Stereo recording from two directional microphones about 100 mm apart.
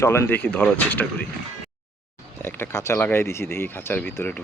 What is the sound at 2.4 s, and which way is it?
Speech, 25° left (ahead or behind).